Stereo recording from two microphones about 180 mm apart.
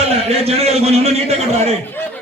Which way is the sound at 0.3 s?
35° right (ahead or behind).